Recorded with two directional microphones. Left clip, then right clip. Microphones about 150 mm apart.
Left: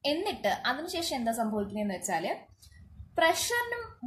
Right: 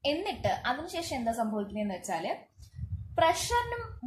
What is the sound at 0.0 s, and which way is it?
A woman's voice, 25° left (ahead or behind).